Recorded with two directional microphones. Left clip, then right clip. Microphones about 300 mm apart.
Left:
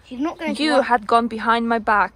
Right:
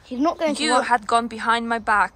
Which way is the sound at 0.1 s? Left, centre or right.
Right.